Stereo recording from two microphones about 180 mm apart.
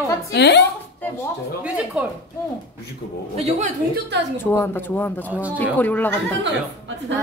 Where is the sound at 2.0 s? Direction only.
5° right (ahead or behind).